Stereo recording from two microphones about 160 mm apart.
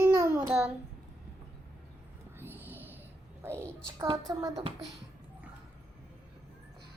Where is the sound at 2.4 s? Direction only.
15° right (ahead or behind).